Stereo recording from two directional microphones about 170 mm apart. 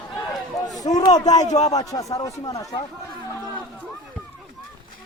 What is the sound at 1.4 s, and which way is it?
Speech, 40° left (ahead or behind).